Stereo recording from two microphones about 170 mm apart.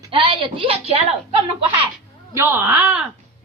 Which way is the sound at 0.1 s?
30° right (ahead or behind).